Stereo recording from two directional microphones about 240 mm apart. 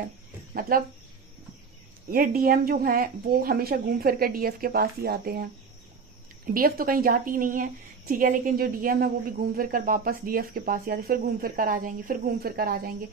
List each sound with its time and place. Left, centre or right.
0.6 s a woman's voice: right
2.0 s a woman's voice: right